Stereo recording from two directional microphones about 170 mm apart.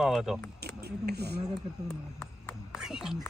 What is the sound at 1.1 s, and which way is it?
Speech, 70° right (ahead or behind).